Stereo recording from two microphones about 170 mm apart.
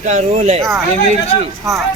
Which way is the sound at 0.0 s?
45° right (ahead or behind).